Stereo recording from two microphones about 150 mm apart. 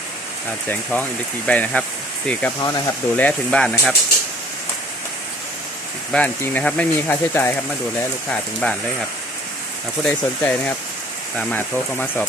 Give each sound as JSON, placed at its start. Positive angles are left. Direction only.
{"t": 0.7, "sound": "speech", "side_deg": 10}
{"t": 2.6, "sound": "speech", "side_deg": 25}
{"t": 3.2, "sound": "speech", "side_deg": 10}
{"t": 6.1, "sound": "speech", "side_deg": 10}
{"t": 8.6, "sound": "speech", "side_deg": 10}
{"t": 10.0, "sound": "speech", "side_deg": 10}